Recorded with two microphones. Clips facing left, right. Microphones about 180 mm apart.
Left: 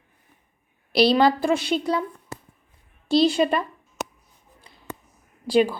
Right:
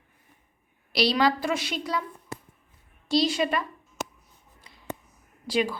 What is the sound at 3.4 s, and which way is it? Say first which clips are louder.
Speech: left 5 dB; 30° left (ahead or behind).